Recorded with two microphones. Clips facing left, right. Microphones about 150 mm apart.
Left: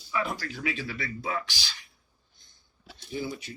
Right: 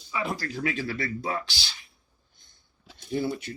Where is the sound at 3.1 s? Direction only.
60° right (ahead or behind).